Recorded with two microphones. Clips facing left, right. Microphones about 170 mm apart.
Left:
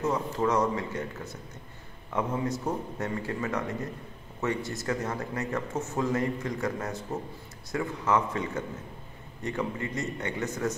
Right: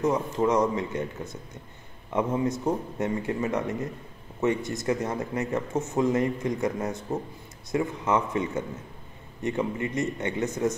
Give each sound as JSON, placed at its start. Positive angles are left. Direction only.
{"t": 0.0, "sound": "speech", "side_deg": -20}